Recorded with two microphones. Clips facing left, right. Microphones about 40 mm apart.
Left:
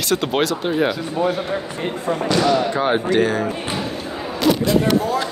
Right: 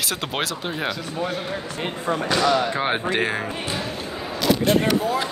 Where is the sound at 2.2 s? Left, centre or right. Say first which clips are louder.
Left 3 dB; centre.